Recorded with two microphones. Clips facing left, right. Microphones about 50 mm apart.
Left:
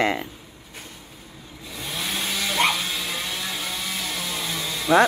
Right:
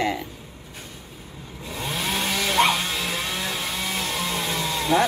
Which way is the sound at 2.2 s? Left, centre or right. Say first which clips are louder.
Right 2 dB; right.